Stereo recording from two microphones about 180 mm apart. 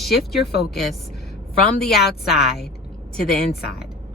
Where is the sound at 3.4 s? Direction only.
60° left (ahead or behind).